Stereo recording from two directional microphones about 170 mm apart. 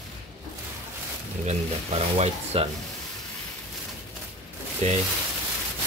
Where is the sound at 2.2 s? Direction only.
40° right (ahead or behind).